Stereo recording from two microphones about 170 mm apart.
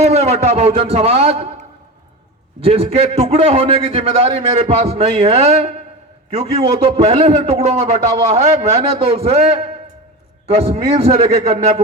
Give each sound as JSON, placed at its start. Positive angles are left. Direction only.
{"t": 0.0, "sound": "a man's voice", "side_deg": -40}
{"t": 2.6, "sound": "a man's voice", "side_deg": -35}
{"t": 11.1, "sound": "a man's voice", "side_deg": -40}